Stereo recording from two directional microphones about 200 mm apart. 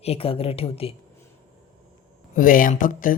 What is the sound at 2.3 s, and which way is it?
Speech, 45° left (ahead or behind).